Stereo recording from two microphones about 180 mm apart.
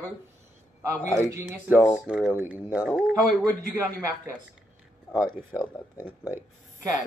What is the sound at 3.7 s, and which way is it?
Speech, 15° right (ahead or behind).